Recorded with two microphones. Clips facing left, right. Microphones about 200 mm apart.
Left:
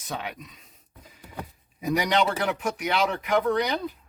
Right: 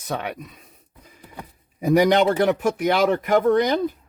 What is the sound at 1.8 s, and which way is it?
Speech, 50° right (ahead or behind).